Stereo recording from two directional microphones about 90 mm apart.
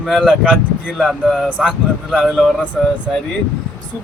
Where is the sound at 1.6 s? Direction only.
5° right (ahead or behind).